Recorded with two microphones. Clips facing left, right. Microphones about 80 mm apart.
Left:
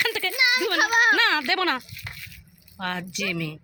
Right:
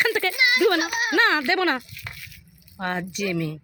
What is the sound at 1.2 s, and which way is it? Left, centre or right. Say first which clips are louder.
Speech: right 3 dB; right.